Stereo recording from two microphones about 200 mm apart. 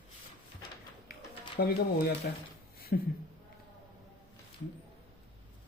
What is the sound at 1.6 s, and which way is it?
Speech, 50° left (ahead or behind).